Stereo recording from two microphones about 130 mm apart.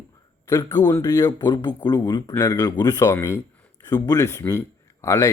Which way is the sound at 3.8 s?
30° left (ahead or behind).